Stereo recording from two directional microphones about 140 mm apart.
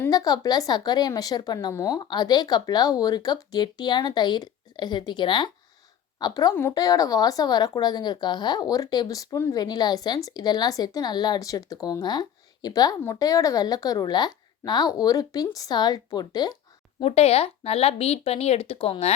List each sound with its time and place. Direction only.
0.1 s a woman's voice: 25° left (ahead or behind)
6.5 s a woman's voice: 15° left (ahead or behind)
17.0 s speech: 45° left (ahead or behind)